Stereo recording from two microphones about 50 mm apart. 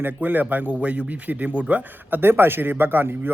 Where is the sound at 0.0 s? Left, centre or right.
Right.